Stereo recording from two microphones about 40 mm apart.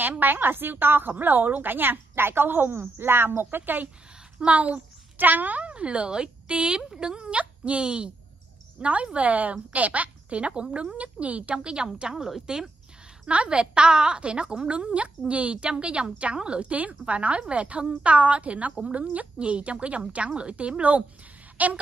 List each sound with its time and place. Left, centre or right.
0.0 s a woman's voice: right
1.1 s a woman's voice: right
4.5 s a woman's voice: right
5.1 s speech: right
5.7 s a woman's voice: right
12.2 s a woman's voice: centre
13.3 s a woman's voice: right